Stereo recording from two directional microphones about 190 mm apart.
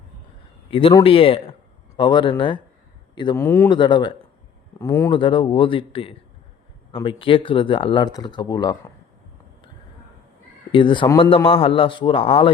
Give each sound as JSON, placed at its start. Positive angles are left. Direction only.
{"t": 0.7, "sound": "speech", "side_deg": 30}
{"t": 3.3, "sound": "speech", "side_deg": 10}
{"t": 3.7, "sound": "speech", "side_deg": 25}
{"t": 5.1, "sound": "speech", "side_deg": 25}
{"t": 10.7, "sound": "speech", "side_deg": 25}